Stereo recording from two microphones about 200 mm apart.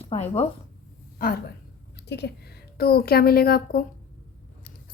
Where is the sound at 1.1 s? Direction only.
45° left (ahead or behind).